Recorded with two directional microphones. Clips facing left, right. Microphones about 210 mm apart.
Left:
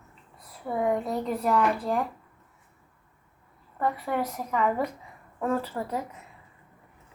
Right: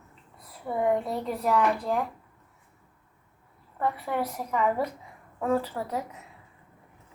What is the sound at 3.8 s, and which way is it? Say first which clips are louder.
Speech: left 1 dB; 5° right (ahead or behind).